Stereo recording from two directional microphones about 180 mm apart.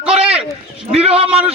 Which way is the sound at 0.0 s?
5° right (ahead or behind).